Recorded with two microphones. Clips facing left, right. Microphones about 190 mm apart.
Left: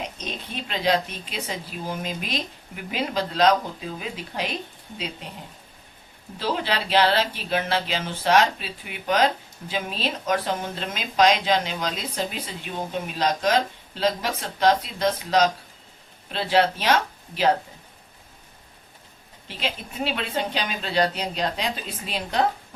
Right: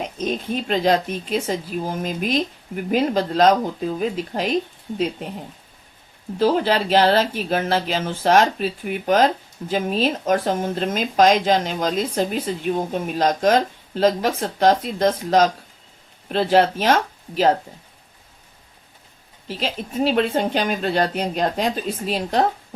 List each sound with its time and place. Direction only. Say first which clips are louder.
0.2 s speech: right 10 dB; 45° right (ahead or behind)
6.4 s speech: right 8 dB; 45° right (ahead or behind)
19.5 s speech: right 4 dB; 40° right (ahead or behind)